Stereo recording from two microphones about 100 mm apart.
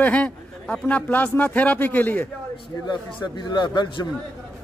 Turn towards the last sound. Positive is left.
turn(degrees=50)  # may be behind; listen again after turning